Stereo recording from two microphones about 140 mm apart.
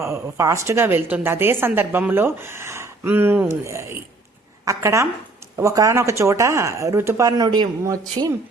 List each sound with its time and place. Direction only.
0.0 s speech: 20° right (ahead or behind)